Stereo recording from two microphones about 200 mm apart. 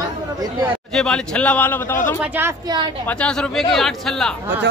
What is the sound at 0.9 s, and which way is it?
A man's voice, 5° left (ahead or behind).